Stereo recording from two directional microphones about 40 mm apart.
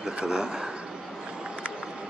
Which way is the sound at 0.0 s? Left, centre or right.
Centre.